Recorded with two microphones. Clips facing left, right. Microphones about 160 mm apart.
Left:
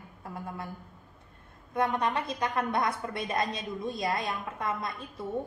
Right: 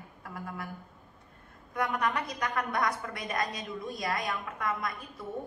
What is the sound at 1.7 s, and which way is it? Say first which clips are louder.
A woman's voice: left 2 dB; 25° left (ahead or behind).